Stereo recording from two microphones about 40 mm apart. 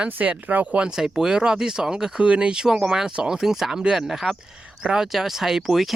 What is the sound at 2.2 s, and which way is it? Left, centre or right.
Speech, right.